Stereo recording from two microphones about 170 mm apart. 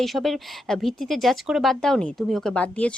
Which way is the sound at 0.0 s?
Centre (ahead or behind).